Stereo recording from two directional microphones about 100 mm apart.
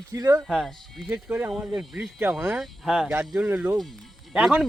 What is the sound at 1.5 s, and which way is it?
Speech, 5° right (ahead or behind).